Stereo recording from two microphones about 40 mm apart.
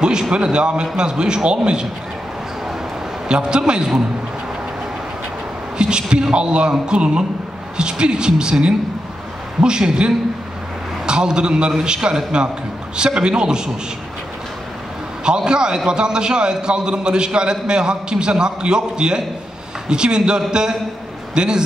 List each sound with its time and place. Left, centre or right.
0.0 s a man's voice: right
3.3 s a man's voice: right
5.8 s a man's voice: right
15.2 s a man's voice: right